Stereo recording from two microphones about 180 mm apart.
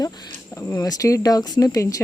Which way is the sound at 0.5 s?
20° left (ahead or behind).